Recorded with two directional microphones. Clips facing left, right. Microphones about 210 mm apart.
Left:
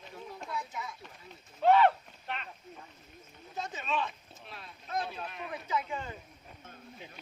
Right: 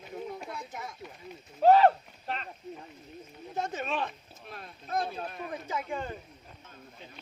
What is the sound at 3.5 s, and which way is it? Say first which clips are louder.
Speech: right 2 dB; 55° right (ahead or behind).